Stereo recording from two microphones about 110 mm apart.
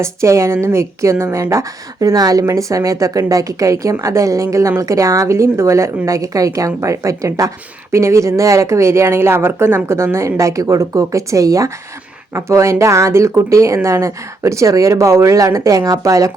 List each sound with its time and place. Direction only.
0.0 s speech: 25° right (ahead or behind)